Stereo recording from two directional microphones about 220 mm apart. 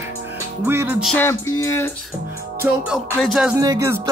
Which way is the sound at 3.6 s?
15° right (ahead or behind).